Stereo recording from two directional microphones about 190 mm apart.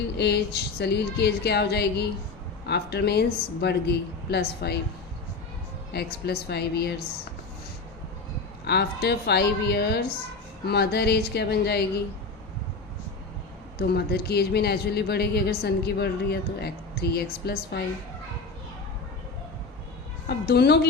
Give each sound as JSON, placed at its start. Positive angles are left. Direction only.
{"t": 0.2, "sound": "speech", "side_deg": 60}
{"t": 5.9, "sound": "speech", "side_deg": 55}
{"t": 8.6, "sound": "speech", "side_deg": 60}
{"t": 13.7, "sound": "speech", "side_deg": 55}
{"t": 20.2, "sound": "speech", "side_deg": 55}